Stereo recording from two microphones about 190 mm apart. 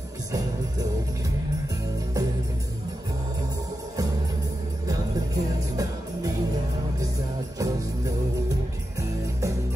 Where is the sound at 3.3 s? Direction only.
20° right (ahead or behind).